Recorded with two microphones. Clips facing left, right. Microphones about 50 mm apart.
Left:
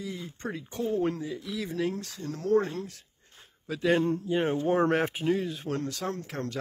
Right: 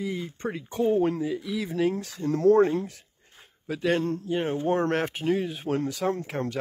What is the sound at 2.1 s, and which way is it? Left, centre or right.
Speech, right.